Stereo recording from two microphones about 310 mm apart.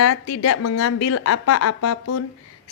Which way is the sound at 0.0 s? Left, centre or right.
Left.